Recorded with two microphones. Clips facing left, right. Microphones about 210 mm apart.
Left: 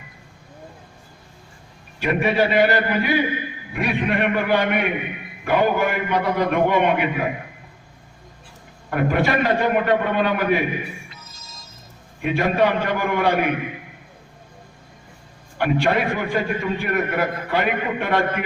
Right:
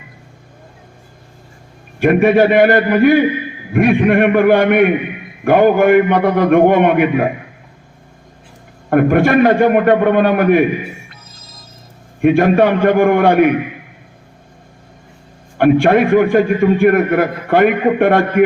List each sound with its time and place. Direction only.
2.0 s a man's voice: 50° right (ahead or behind)
8.9 s a man's voice: 55° right (ahead or behind)
11.1 s music: 55° right (ahead or behind)
12.2 s a man's voice: 50° right (ahead or behind)
15.5 s a man's voice: 55° right (ahead or behind)